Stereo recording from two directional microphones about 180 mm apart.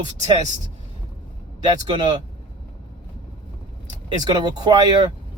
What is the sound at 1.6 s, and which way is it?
Speech, 25° right (ahead or behind).